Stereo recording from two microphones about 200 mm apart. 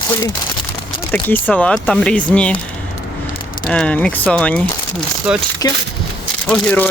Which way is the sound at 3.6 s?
5° left (ahead or behind).